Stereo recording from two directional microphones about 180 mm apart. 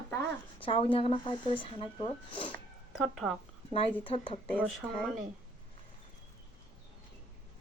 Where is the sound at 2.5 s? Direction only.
Centre (ahead or behind).